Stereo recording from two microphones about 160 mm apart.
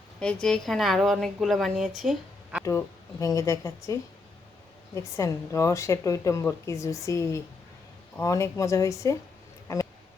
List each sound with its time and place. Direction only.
0.2 s a woman's voice: 5° left (ahead or behind)
2.6 s a woman's voice: 20° left (ahead or behind)
4.9 s a woman's voice: 20° left (ahead or behind)
9.7 s a sound: 20° left (ahead or behind)